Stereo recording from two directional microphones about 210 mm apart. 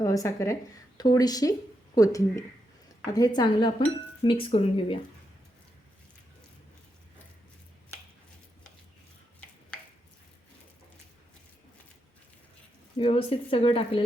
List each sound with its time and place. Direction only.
0.0 s speech: 15° left (ahead or behind)
13.0 s speech: 25° left (ahead or behind)